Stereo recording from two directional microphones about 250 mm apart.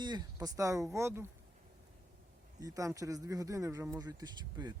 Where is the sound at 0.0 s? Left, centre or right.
Centre.